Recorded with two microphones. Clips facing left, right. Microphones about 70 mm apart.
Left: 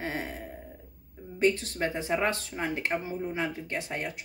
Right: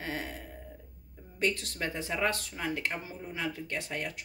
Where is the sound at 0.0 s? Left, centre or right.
Left.